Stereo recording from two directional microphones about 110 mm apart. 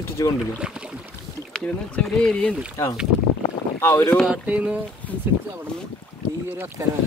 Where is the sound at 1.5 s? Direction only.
5° left (ahead or behind).